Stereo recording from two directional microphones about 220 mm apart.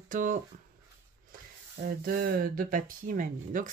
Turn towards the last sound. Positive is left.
turn(degrees=-40)  # may be behind; listen again after turning